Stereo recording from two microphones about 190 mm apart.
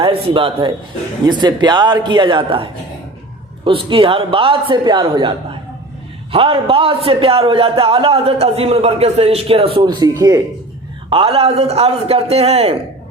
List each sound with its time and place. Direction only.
0.0 s a man's voice: 30° right (ahead or behind)
11.1 s a man's voice: 30° right (ahead or behind)